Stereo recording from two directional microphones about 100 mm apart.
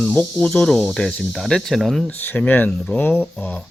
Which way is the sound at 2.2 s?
20° left (ahead or behind).